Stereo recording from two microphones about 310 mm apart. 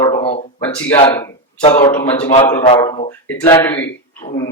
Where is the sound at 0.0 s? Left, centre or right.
Centre.